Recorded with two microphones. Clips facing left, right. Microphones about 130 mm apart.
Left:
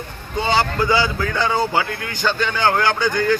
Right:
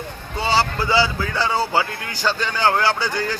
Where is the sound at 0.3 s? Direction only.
35° right (ahead or behind).